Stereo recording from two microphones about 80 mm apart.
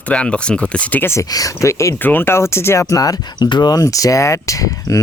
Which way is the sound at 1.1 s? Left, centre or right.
Left.